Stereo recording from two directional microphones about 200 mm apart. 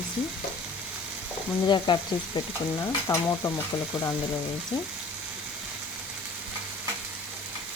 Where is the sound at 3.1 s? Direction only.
15° left (ahead or behind).